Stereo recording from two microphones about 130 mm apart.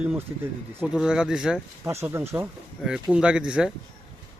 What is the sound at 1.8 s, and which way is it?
Speech, 20° right (ahead or behind).